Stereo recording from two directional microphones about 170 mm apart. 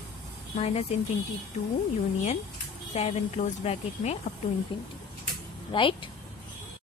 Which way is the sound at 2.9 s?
40° left (ahead or behind).